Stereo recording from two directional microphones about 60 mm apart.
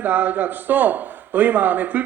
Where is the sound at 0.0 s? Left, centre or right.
Right.